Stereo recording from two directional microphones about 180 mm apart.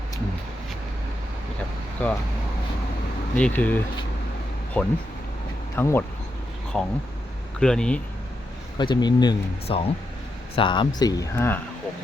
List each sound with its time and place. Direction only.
3.3 s speech: 10° left (ahead or behind)
4.8 s speech: 10° left (ahead or behind)
6.7 s speech: centre (ahead or behind)
8.8 s speech: 25° left (ahead or behind)